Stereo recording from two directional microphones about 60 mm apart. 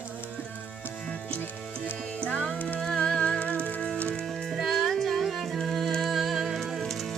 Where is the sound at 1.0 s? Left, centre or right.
Centre.